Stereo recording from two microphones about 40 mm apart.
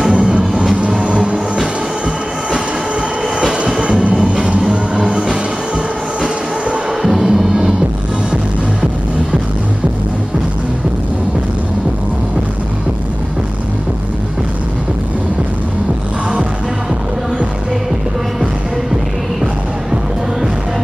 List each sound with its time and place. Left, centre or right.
0.1 s music: right
1.0 s vehicle: right
3.4 s music: centre
5.0 s music: centre
7.0 s music: centre